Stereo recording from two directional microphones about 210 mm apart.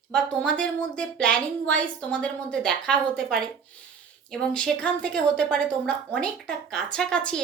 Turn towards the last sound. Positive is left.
turn(degrees=5)  # may be behind; listen again after turning